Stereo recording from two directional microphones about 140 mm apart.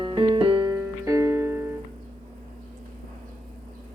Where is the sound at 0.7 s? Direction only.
20° right (ahead or behind).